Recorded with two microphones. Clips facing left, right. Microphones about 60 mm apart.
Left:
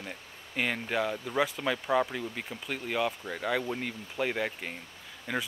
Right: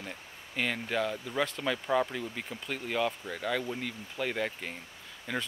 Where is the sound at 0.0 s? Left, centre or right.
Centre.